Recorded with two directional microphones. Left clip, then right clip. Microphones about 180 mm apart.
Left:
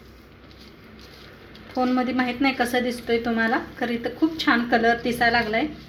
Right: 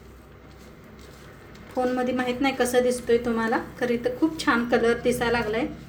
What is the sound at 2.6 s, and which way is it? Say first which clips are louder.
A woman's voice: right 2 dB; 15° left (ahead or behind).